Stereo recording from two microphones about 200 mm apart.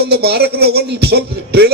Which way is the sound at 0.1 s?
55° right (ahead or behind).